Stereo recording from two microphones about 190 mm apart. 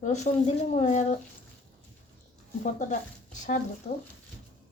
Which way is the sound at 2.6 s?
40° left (ahead or behind).